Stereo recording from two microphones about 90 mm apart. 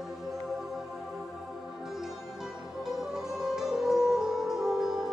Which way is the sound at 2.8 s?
5° right (ahead or behind).